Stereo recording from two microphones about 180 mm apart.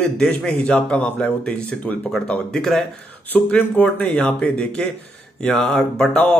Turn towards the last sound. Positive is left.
turn(degrees=5)  # may be behind; listen again after turning